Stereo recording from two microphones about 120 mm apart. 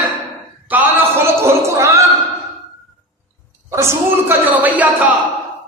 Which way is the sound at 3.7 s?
20° right (ahead or behind).